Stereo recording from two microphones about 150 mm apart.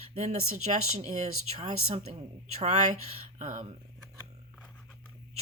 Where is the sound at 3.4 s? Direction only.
60° right (ahead or behind).